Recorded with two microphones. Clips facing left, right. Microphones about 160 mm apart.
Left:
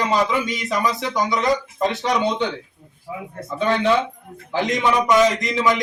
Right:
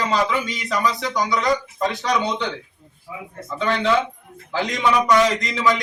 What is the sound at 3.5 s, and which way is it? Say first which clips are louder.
A man's voice: left 1 dB; 20° left (ahead or behind).